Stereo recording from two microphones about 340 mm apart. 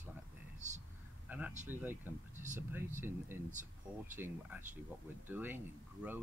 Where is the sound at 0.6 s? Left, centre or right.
Right.